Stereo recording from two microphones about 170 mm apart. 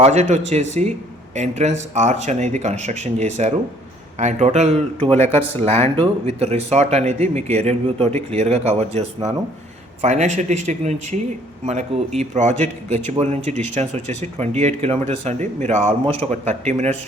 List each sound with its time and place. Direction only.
0.0 s speech: 40° right (ahead or behind)